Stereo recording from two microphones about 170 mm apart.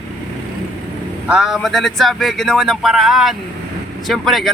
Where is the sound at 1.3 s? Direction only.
Centre (ahead or behind).